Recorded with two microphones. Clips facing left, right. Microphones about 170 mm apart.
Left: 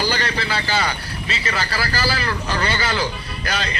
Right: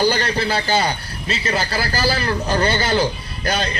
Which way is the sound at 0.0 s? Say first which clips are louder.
Right 5 dB; 25° right (ahead or behind).